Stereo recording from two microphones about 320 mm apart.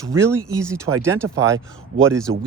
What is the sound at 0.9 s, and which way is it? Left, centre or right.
Speech, right.